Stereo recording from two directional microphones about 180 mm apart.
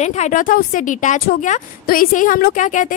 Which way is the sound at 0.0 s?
45° left (ahead or behind).